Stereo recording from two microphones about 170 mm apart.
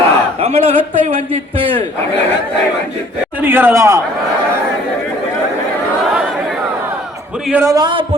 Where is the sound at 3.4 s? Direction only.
15° right (ahead or behind).